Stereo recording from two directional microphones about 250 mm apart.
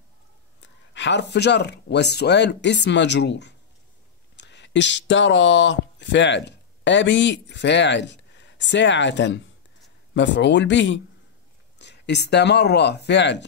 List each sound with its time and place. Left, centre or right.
0.6 s speech: left